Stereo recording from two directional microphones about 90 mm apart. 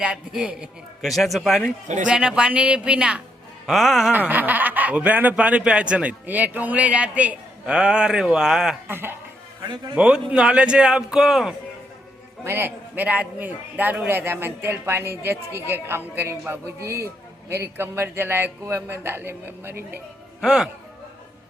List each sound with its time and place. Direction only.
0.0 s a man's voice: 10° right (ahead or behind)
4.1 s speech: 20° right (ahead or behind)
8.9 s a man's voice: 25° right (ahead or behind)
9.9 s speech: 10° right (ahead or behind)
12.5 s a man's voice: 25° right (ahead or behind)
20.4 s a man's voice: 5° right (ahead or behind)